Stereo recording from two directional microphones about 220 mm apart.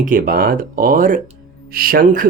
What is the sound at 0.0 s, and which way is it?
Speech, 40° right (ahead or behind).